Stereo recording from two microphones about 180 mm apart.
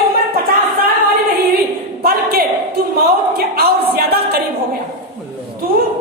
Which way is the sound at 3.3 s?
60° right (ahead or behind).